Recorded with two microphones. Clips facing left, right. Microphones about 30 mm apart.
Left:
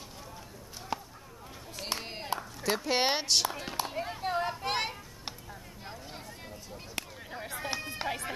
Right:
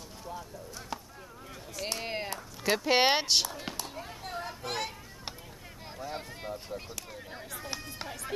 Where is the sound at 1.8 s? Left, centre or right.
Centre.